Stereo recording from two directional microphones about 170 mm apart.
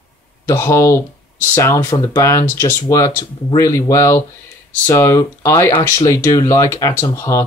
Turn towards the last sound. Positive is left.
turn(degrees=15)  # may be behind; listen again after turning